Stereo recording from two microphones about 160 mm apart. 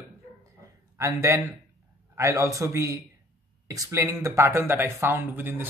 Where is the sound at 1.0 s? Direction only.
20° right (ahead or behind).